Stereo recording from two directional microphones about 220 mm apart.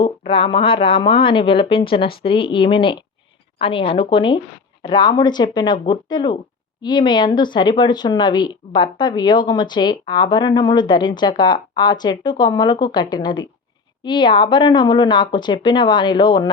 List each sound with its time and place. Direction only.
0.0 s speech: 25° left (ahead or behind)